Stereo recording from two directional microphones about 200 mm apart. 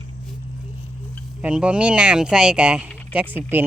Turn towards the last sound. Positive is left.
turn(degrees=-10)  # may be behind; listen again after turning